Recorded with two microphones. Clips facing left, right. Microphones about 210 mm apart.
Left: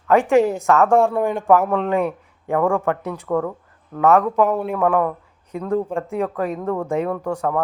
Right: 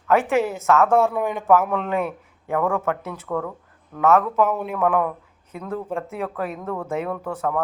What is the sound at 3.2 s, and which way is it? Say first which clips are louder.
Speech: left 5 dB; 20° left (ahead or behind).